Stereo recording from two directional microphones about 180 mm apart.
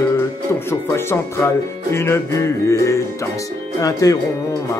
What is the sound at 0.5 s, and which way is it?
Speech, 15° left (ahead or behind).